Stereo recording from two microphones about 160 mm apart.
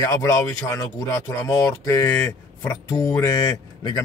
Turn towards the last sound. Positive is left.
turn(degrees=20)  # may be behind; listen again after turning